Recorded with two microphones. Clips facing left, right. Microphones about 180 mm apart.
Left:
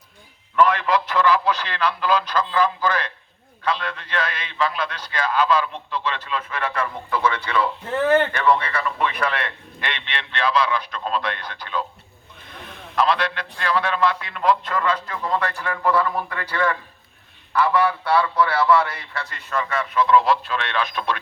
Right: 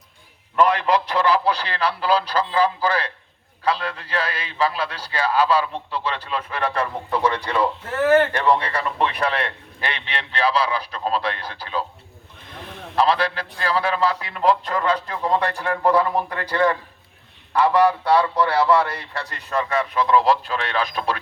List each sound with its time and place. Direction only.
0.5 s a man's voice: 35° right (ahead or behind)
7.9 s speech: 5° right (ahead or behind)
8.4 s a man's voice: 35° right (ahead or behind)
13.0 s a man's voice: 35° right (ahead or behind)
17.5 s a man's voice: 35° right (ahead or behind)